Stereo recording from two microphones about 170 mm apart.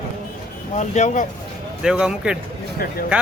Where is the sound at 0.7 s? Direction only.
45° left (ahead or behind).